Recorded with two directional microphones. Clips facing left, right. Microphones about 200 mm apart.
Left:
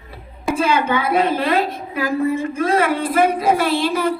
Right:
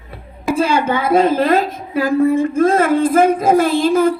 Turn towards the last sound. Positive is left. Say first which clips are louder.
# right 5 dB
turn(degrees=-45)  # may be behind; listen again after turning